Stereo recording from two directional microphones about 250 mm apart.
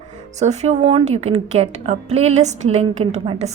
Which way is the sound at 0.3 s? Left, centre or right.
Right.